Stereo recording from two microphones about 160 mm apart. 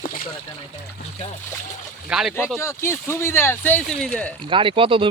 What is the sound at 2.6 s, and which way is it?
Speech, 15° left (ahead or behind).